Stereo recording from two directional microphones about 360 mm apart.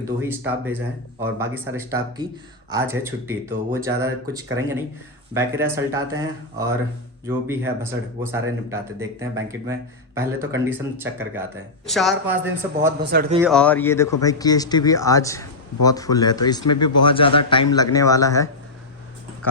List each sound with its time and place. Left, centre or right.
0.0 s speech: centre
13.0 s a man's voice: right
13.5 s speech: centre